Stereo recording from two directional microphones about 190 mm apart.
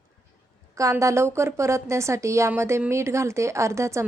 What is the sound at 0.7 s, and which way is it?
Speech, 15° right (ahead or behind).